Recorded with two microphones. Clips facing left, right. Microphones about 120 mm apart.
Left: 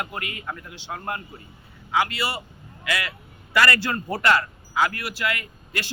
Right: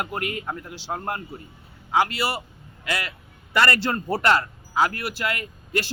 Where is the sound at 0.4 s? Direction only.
35° right (ahead or behind).